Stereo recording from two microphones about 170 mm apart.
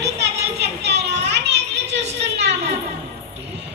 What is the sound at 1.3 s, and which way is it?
Children playing, 85° right.